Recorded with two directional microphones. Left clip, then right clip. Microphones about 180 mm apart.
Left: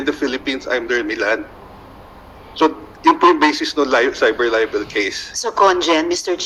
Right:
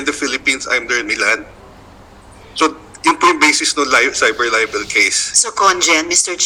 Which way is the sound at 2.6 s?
20° right (ahead or behind).